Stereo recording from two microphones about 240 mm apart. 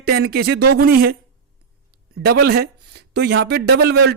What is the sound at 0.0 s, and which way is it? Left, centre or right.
Speech, right.